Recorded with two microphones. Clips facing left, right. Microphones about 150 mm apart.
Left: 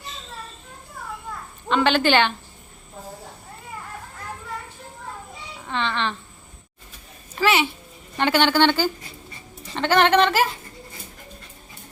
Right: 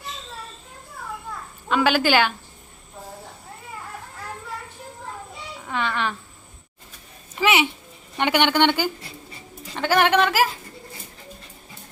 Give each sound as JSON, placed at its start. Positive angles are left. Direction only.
{"t": 1.7, "sound": "a woman's voice", "side_deg": -5}
{"t": 5.6, "sound": "a woman's voice", "side_deg": -10}
{"t": 7.3, "sound": "a woman's voice", "side_deg": -15}